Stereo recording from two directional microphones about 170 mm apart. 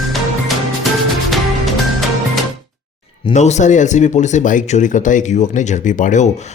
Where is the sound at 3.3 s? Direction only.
40° left (ahead or behind).